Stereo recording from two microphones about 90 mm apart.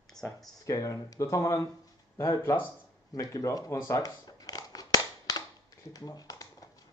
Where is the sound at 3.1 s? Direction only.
40° left (ahead or behind).